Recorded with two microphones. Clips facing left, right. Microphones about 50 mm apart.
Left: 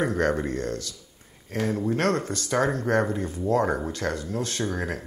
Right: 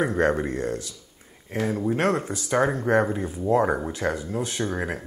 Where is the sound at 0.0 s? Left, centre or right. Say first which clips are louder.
Right 2 dB; centre.